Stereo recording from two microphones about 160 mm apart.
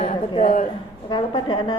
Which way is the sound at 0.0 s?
40° left (ahead or behind).